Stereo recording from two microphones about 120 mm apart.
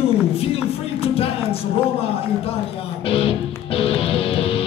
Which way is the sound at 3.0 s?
50° left (ahead or behind).